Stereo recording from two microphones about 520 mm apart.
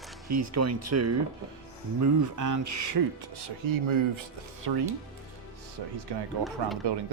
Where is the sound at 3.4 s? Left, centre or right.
Right.